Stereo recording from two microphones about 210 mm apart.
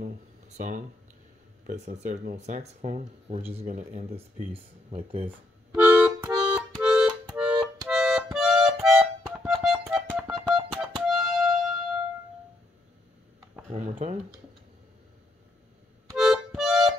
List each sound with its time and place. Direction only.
0.0 s a sound: 40° right (ahead or behind)
1.7 s speech: 40° right (ahead or behind)
5.8 s accordion: 10° right (ahead or behind)
6.7 s music: 5° right (ahead or behind)
7.9 s accordion: centre (ahead or behind)
10.3 s music: 5° right (ahead or behind)
13.7 s a sound: 35° right (ahead or behind)
16.2 s music: centre (ahead or behind)